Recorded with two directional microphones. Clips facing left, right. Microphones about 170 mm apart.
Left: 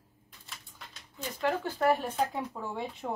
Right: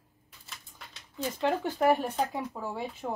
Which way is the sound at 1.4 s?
20° right (ahead or behind).